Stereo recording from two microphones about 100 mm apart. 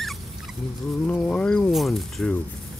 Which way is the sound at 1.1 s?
15° left (ahead or behind).